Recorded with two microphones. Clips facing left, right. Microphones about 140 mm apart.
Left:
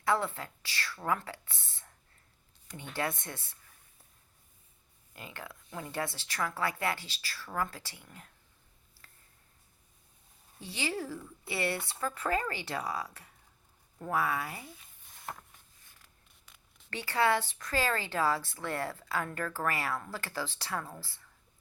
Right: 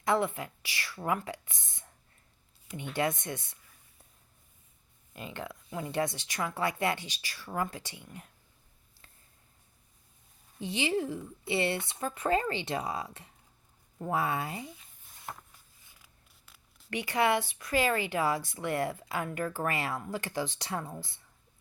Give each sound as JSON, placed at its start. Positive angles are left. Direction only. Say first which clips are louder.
{"t": 0.0, "sound": "speech", "louder": "right 2 dB", "side_deg": -15}
{"t": 2.9, "sound": "speech", "louder": "right 4 dB", "side_deg": -15}
{"t": 5.1, "sound": "speech", "louder": "right 5 dB", "side_deg": -20}
{"t": 10.6, "sound": "speech", "louder": "right 6 dB", "side_deg": -20}
{"t": 15.9, "sound": "zipper", "louder": "right 2 dB", "side_deg": -5}
{"t": 16.9, "sound": "speech", "louder": "right 1 dB", "side_deg": -15}